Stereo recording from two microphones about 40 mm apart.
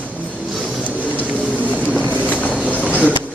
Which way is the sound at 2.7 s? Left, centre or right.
Left.